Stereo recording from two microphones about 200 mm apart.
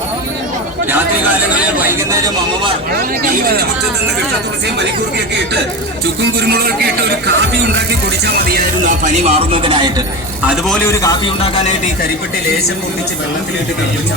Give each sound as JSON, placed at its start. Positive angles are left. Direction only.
{"t": 1.8, "sound": "speech", "side_deg": -15}
{"t": 6.4, "sound": "a man's voice", "side_deg": -50}
{"t": 8.2, "sound": "speech", "side_deg": -50}
{"t": 10.4, "sound": "a man's voice", "side_deg": -5}
{"t": 10.8, "sound": "a man's voice", "side_deg": 15}